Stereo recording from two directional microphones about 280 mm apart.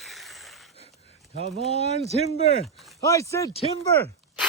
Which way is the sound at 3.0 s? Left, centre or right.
Centre.